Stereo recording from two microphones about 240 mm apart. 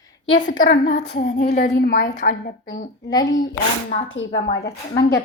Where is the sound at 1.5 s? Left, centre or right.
Left.